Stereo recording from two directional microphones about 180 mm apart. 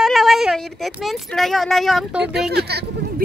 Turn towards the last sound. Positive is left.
turn(degrees=-65)  # may be behind; listen again after turning